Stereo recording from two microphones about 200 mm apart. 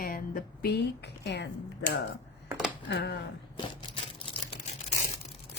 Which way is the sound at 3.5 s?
25° left (ahead or behind).